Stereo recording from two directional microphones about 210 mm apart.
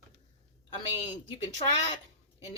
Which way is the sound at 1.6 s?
30° left (ahead or behind).